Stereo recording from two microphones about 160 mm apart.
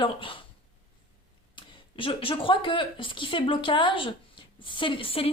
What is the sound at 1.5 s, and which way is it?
A woman's voice, 30° left (ahead or behind).